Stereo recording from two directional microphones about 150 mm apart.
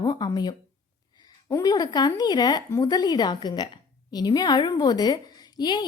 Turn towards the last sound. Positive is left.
turn(degrees=25)  # may be behind; listen again after turning